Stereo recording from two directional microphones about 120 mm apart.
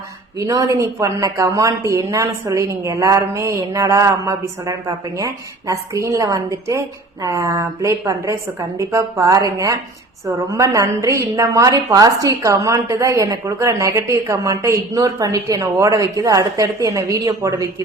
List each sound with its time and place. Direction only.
0.3 s speech: 25° right (ahead or behind)